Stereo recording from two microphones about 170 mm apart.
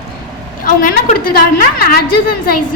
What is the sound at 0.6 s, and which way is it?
A woman's voice, 50° left (ahead or behind).